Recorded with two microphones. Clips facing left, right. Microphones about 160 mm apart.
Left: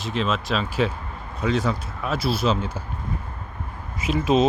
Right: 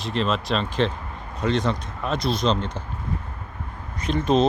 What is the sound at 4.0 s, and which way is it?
Speech, 5° left (ahead or behind).